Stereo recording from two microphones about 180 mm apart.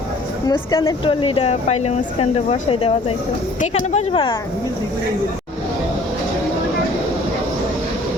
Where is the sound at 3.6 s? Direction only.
40° left (ahead or behind).